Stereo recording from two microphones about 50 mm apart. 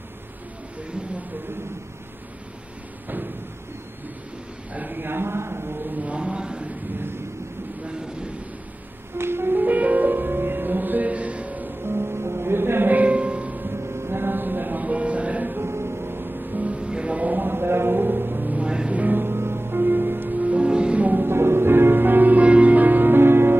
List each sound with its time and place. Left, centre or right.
4.7 s a sound: right
5.9 s a sound: right
9.2 s music: right
9.6 s music: right
11.8 s music: right
12.9 s music: right
13.7 s music: right
15.5 s music: right
16.5 s music: right
18.7 s music: centre
18.9 s music: right
19.2 s music: right
21.1 s music: right